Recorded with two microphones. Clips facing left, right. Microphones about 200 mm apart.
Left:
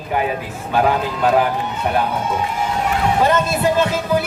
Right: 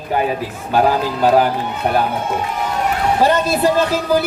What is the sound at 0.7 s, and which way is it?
Speech, 35° right (ahead or behind).